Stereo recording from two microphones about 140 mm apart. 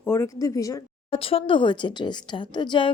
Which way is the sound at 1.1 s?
40° left (ahead or behind).